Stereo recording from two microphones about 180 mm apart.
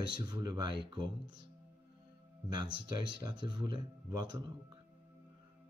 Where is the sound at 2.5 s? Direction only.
25° right (ahead or behind).